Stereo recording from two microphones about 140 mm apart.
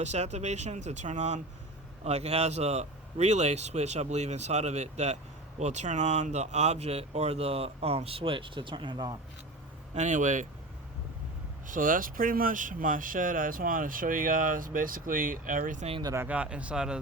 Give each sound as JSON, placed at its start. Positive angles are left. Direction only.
{"t": 0.0, "sound": "speech", "side_deg": -55}
{"t": 9.9, "sound": "speech", "side_deg": -60}
{"t": 11.6, "sound": "speech", "side_deg": -70}
{"t": 15.9, "sound": "speech", "side_deg": -35}
{"t": 16.1, "sound": "speech", "side_deg": -10}